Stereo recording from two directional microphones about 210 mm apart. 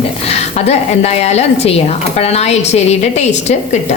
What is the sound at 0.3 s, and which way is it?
A woman's voice, 30° left (ahead or behind).